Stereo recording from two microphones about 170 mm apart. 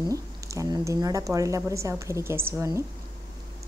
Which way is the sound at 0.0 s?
20° right (ahead or behind).